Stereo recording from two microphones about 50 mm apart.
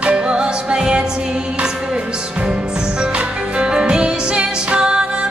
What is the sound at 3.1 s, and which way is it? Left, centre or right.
Music, centre.